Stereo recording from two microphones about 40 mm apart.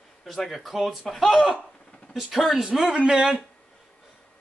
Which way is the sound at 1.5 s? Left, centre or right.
Left.